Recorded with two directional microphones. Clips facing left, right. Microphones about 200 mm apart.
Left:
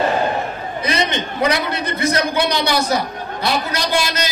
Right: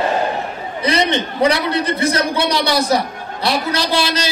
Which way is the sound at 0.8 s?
30° right (ahead or behind).